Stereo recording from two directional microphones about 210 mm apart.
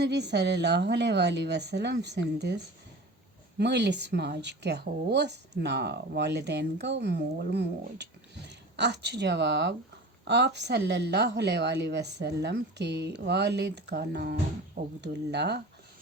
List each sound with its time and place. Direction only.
0.0 s speech: 55° right (ahead or behind)
3.6 s speech: 55° right (ahead or behind)